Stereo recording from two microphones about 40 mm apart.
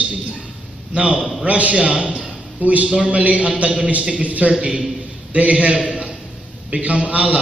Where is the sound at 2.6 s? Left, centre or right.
Right.